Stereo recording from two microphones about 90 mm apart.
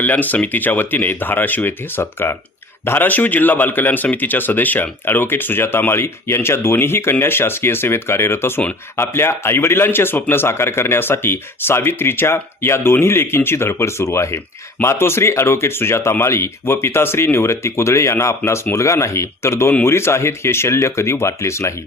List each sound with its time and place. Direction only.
0.0 s speech: 20° left (ahead or behind)